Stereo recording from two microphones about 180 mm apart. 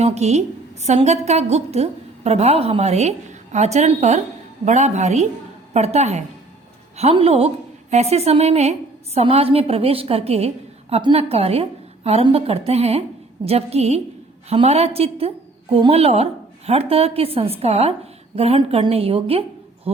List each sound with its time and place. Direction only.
0.0 s a woman's voice: 35° right (ahead or behind)